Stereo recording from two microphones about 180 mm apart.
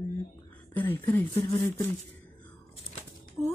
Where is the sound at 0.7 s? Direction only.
10° left (ahead or behind).